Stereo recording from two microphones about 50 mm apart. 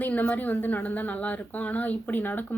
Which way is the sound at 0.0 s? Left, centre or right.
Left.